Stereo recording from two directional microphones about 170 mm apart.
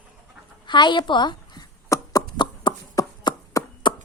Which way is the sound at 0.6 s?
25° left (ahead or behind).